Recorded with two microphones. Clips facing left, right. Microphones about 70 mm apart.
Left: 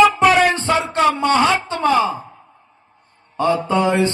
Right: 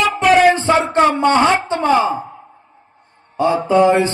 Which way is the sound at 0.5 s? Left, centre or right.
Right.